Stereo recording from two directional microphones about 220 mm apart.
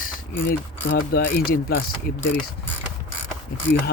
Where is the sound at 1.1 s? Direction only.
40° left (ahead or behind).